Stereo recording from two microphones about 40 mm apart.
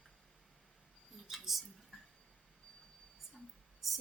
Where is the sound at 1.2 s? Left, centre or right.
Centre.